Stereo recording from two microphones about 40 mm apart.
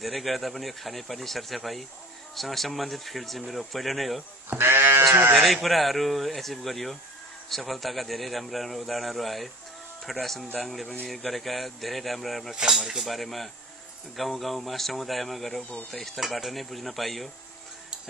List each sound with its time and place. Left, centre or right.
0.0 s speech: centre
4.6 s livestock: right
5.3 s speech: centre